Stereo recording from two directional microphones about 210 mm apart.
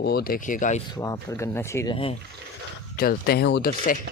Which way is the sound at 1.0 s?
15° left (ahead or behind).